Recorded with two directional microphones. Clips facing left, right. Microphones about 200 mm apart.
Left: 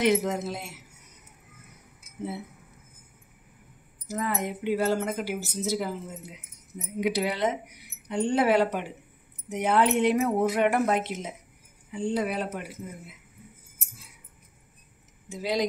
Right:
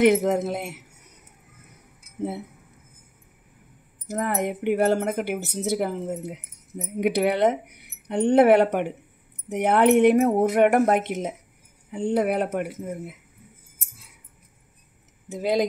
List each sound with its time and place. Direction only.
0.0 s speech: 50° right (ahead or behind)
4.1 s speech: 60° right (ahead or behind)
15.2 s speech: 55° right (ahead or behind)